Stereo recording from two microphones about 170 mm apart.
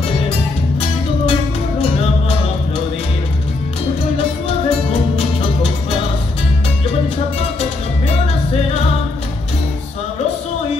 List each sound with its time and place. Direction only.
4.2 s music: 35° left (ahead or behind)